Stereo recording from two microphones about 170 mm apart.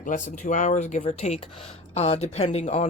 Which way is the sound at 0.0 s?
50° left (ahead or behind).